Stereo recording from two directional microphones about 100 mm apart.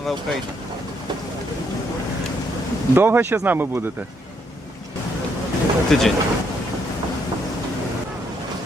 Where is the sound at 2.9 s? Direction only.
20° right (ahead or behind).